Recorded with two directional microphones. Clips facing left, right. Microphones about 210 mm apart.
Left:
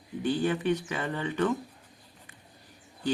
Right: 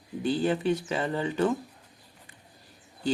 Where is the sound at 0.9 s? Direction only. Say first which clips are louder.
Right 3 dB; 25° right (ahead or behind).